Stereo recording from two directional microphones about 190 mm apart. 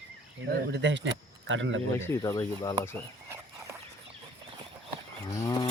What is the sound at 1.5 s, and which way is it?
Speech, 80° right.